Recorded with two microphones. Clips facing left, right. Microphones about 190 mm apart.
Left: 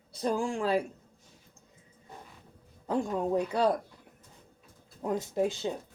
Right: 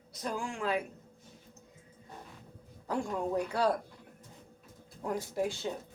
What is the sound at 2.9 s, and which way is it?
Speech, 20° left (ahead or behind).